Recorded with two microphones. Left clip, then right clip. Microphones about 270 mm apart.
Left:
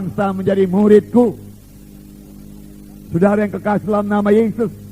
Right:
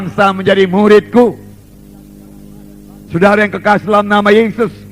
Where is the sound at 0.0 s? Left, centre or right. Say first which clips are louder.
Right 8 dB; right.